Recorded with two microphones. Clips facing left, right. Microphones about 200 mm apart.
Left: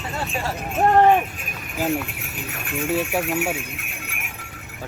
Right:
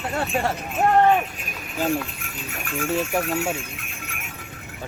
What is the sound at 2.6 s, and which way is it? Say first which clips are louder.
Speech: left 1 dB; 20° left (ahead or behind).